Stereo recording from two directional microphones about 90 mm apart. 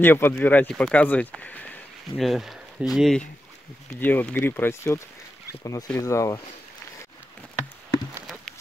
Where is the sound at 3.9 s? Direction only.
20° left (ahead or behind).